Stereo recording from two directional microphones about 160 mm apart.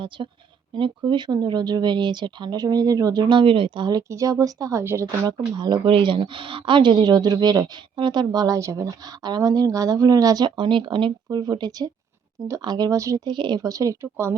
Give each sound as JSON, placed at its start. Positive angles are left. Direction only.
{"t": 0.2, "sound": "speech", "side_deg": -30}
{"t": 5.5, "sound": "speech", "side_deg": -25}